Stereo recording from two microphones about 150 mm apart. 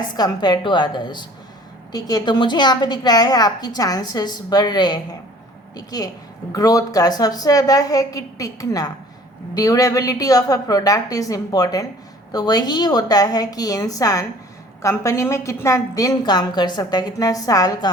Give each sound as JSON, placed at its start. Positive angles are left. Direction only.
{"t": 0.2, "sound": "a woman's voice", "side_deg": 30}